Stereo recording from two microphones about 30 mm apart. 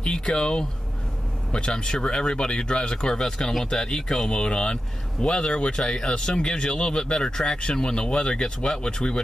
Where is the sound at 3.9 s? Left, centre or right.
Centre.